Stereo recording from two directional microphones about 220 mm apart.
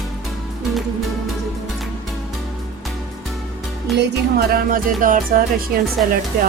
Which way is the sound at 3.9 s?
50° right (ahead or behind).